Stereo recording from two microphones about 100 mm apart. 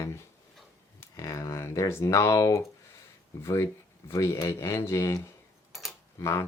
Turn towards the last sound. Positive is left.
turn(degrees=30)  # may be behind; listen again after turning